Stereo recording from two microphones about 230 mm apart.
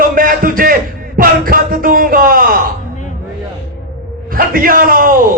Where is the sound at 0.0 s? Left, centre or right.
Right.